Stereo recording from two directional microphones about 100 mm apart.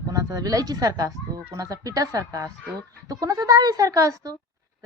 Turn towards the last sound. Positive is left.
turn(degrees=-35)  # may be behind; listen again after turning